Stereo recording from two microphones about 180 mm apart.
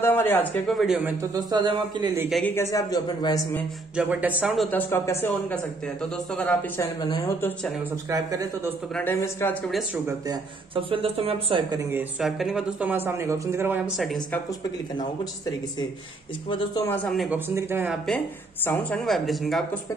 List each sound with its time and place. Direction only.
0.0 s speech: 10° left (ahead or behind); by 1.1 s 5° right (ahead or behind)
1.3 s speech: 25° right (ahead or behind)
2.4 s a man's voice: 15° left (ahead or behind)
3.9 s speech: 10° right (ahead or behind); by 5.1 s 10° left (ahead or behind)
6.3 s speech: 5° left (ahead or behind)
7.0 s a man's voice: 20° left (ahead or behind)
8.1 s speech: 20° right (ahead or behind)
8.9 s speech: 10° left (ahead or behind)
10.0 s speech: 20° right (ahead or behind)
11.9 s speech: 5° right (ahead or behind)
16.4 s a man's voice: 25° left (ahead or behind)
16.8 s speech: 10° left (ahead or behind)
17.3 s speech: 15° right (ahead or behind)
18.7 s speech: 5° left (ahead or behind)